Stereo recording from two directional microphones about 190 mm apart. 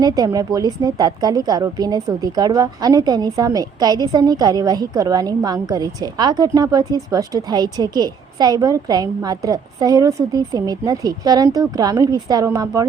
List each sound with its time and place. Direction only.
0.0 s a woman's voice: 20° right (ahead or behind)